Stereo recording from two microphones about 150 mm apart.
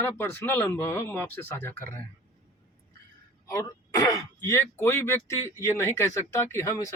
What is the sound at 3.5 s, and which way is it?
Speech, 20° left (ahead or behind).